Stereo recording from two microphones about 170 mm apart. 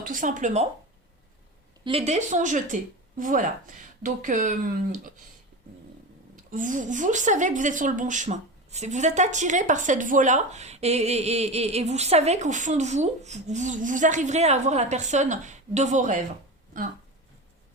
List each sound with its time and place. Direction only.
0.1 s speech: 50° right (ahead or behind)
1.8 s speech: 35° right (ahead or behind); by 5.2 s 50° right (ahead or behind)
6.3 s speech: 50° right (ahead or behind)